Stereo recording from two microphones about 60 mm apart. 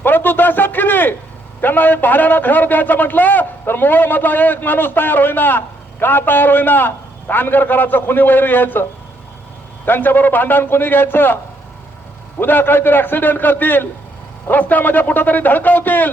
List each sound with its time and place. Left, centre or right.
0.0 s a sound: left
1.6 s a man's voice: left
9.8 s a man's voice: left
12.4 s a man's voice: left